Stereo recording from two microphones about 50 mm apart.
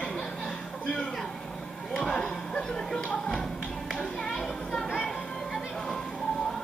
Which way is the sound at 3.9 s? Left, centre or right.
Centre.